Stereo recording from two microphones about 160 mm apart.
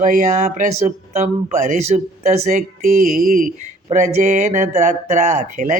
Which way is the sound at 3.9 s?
45° right (ahead or behind).